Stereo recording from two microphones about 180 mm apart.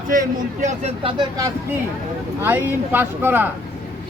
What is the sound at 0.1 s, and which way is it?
A man's voice, 45° right (ahead or behind).